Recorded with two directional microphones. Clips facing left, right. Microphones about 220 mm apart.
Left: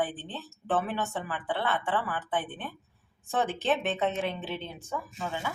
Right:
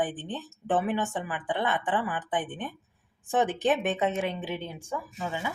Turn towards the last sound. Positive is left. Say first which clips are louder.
# right 1 dB
turn(degrees=-15)  # may be behind; listen again after turning